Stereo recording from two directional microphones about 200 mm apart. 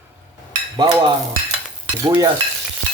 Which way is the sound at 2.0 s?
20° right (ahead or behind).